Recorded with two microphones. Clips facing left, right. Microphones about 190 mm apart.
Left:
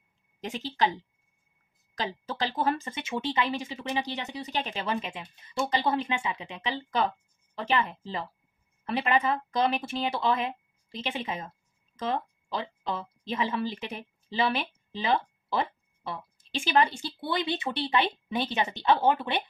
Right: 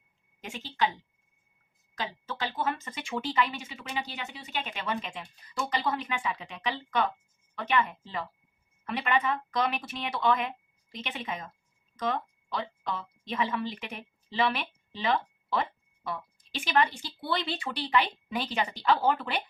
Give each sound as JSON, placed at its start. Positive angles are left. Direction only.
{"t": 0.4, "sound": "speech", "side_deg": 40}
{"t": 2.2, "sound": "speech", "side_deg": 35}